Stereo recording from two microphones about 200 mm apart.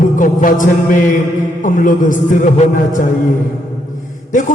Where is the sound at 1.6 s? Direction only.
40° left (ahead or behind).